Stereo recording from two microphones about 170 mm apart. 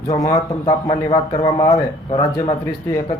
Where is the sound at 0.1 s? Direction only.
20° left (ahead or behind).